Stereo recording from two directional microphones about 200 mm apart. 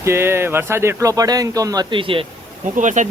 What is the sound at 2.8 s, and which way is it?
Speech, 40° right (ahead or behind).